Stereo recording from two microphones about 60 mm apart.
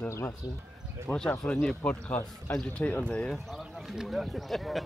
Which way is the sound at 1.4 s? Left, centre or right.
Centre.